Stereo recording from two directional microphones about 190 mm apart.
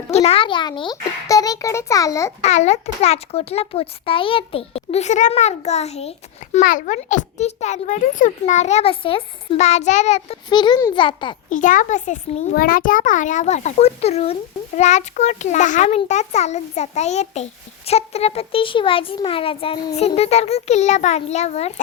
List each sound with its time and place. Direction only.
0.1 s a child's voice: 35° left (ahead or behind); by 2.3 s 15° left (ahead or behind)
2.4 s a child's voice: 35° left (ahead or behind)
6.6 s a child's voice: 45° left (ahead or behind); by 11.3 s 25° left (ahead or behind)
11.4 s a child's voice: 40° left (ahead or behind)